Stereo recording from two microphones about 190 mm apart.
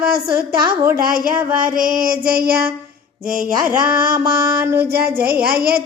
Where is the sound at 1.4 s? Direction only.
15° right (ahead or behind).